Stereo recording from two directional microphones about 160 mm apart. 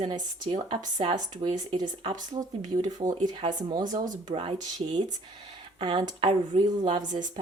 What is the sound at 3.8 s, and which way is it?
Speech, 55° right (ahead or behind).